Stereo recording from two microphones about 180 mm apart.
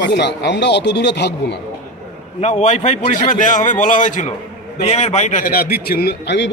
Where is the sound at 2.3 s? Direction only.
40° left (ahead or behind); by 6.5 s 75° left (ahead or behind).